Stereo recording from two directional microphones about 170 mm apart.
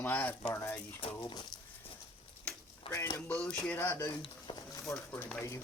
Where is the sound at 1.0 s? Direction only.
30° left (ahead or behind).